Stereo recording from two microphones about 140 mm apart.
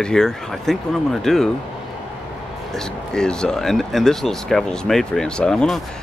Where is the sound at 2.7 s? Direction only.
5° left (ahead or behind).